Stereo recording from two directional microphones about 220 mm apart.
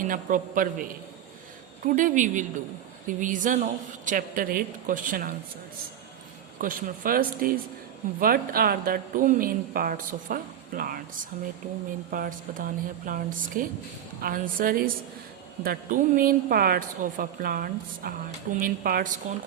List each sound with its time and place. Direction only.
0.0 s speech: 35° right (ahead or behind)
6.6 s speech: 40° right (ahead or behind)